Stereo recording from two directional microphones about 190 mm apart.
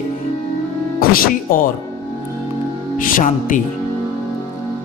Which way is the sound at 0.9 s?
50° left (ahead or behind).